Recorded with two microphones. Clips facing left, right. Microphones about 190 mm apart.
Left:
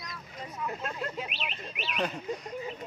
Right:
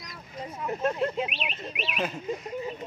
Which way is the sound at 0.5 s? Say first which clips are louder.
Right 8 dB; 25° right (ahead or behind).